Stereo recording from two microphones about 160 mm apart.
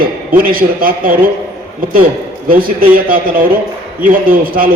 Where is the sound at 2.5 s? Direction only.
65° right (ahead or behind).